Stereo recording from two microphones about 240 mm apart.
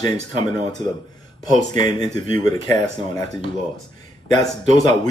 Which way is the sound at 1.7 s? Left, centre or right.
Centre.